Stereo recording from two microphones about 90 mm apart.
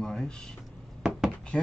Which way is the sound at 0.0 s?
5° left (ahead or behind).